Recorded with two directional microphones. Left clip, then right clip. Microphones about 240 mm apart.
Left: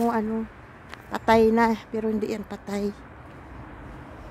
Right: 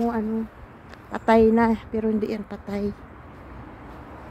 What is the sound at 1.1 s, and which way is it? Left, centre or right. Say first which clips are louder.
A woman's voice: right 1 dB; centre.